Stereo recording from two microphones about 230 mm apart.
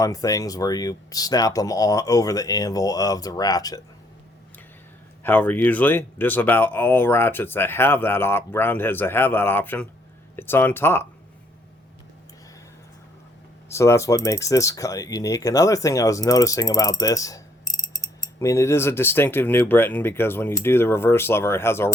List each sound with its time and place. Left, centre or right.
0.0 s speech: centre
5.2 s speech: centre
13.7 s speech: centre